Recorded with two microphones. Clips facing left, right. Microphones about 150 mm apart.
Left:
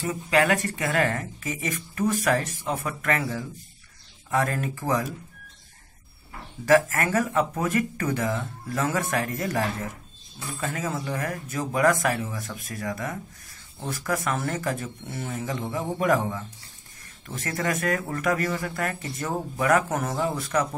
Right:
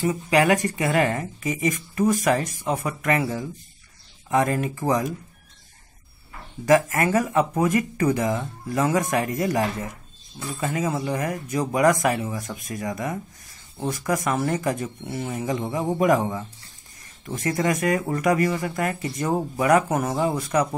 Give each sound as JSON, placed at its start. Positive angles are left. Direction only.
{"t": 0.1, "sound": "speech", "side_deg": -15}
{"t": 6.6, "sound": "speech", "side_deg": -15}